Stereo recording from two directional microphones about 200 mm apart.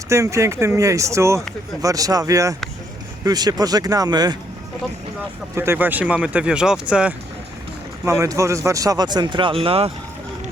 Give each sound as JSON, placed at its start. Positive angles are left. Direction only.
{"t": 0.1, "sound": "speech", "side_deg": -15}
{"t": 5.5, "sound": "speech", "side_deg": -10}
{"t": 8.0, "sound": "speech", "side_deg": -15}